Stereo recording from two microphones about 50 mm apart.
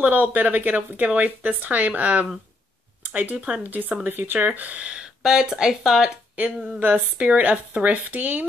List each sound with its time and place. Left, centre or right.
0.0 s speech: right
4.6 s speech: right
5.2 s speech: centre
6.8 s speech: right